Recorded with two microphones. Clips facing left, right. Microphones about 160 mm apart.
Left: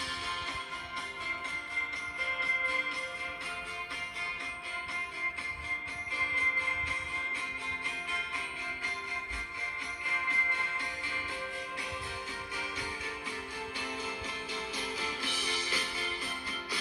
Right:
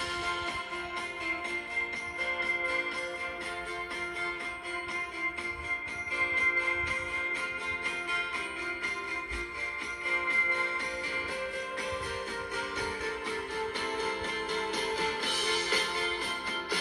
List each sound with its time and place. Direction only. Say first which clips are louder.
0.0 s music: right 5 dB; 50° right (ahead or behind)
2.2 s music: right 4 dB; 45° right (ahead or behind)
13.7 s music: right 6 dB; 60° right (ahead or behind)